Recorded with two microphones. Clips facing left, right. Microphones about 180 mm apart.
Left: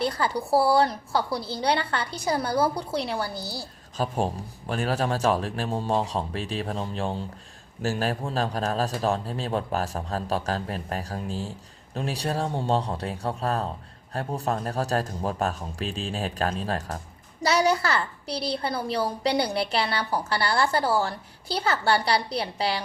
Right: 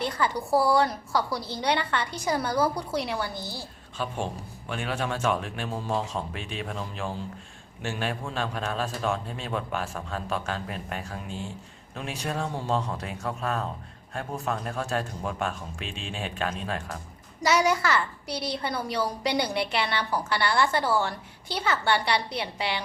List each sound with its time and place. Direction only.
0.0 s a woman's voice: 35° left (ahead or behind)